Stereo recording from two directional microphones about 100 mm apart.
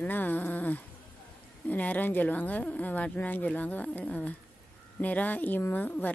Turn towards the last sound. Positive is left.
turn(degrees=15)  # may be behind; listen again after turning